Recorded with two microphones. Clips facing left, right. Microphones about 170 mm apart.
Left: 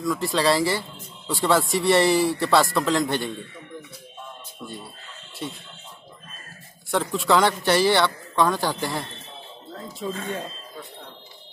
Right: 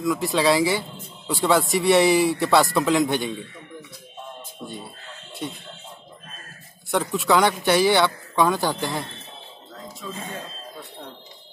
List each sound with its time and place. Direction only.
0.0 s speech: centre (ahead or behind)
6.9 s speech: 5° right (ahead or behind)
10.0 s speech: 40° left (ahead or behind)